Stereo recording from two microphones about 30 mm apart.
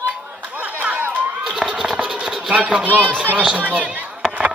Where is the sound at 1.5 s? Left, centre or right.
Centre.